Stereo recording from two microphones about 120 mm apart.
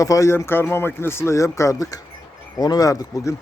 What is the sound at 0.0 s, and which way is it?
Speech, 25° left (ahead or behind).